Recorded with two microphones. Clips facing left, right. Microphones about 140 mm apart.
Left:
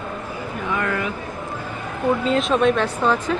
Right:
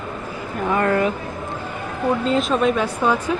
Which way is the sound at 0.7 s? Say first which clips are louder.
Right 6 dB; 40° right (ahead or behind).